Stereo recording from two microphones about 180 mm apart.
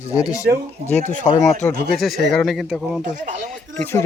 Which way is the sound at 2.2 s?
Centre (ahead or behind).